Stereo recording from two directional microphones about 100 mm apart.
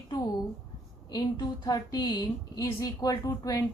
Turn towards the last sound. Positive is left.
turn(degrees=35)  # may be behind; listen again after turning